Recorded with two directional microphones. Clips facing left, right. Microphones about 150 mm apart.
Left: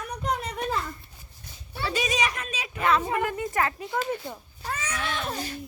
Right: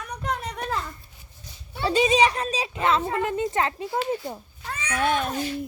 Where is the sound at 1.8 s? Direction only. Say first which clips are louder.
Right 8 dB; 30° right (ahead or behind).